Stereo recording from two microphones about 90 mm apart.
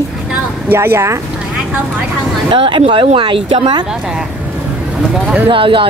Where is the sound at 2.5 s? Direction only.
70° right (ahead or behind).